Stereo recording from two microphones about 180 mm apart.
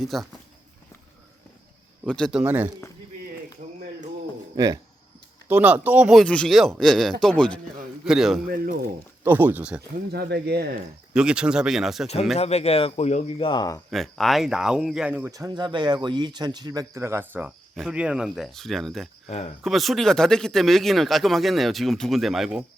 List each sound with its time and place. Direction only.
0.0 s speech: centre (ahead or behind)
2.0 s speech: 5° left (ahead or behind)
2.4 s speech: 10° right (ahead or behind)
4.5 s speech: 20° right (ahead or behind)
5.5 s speech: 10° right (ahead or behind)
10.1 s speech: 65° right (ahead or behind)
11.1 s speech: 5° right (ahead or behind)
12.4 s speech: 35° left (ahead or behind); by 13.8 s 20° left (ahead or behind)
13.9 s speech: centre (ahead or behind)
15.3 s speech: 20° right (ahead or behind); by 19.0 s centre (ahead or behind)
19.3 s speech: 40° left (ahead or behind)
19.6 s speech: centre (ahead or behind)